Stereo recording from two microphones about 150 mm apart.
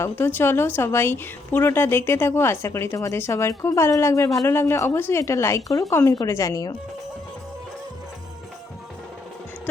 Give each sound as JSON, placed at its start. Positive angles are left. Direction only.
{"t": 0.0, "sound": "a woman's voice", "side_deg": 15}